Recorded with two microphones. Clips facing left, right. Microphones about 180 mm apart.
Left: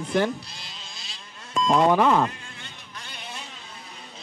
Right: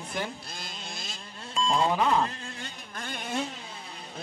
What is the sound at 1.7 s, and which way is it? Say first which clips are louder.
Speech: left 6 dB; 65° left (ahead or behind).